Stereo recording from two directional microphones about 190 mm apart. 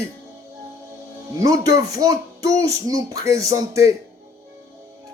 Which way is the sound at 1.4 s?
20° right (ahead or behind).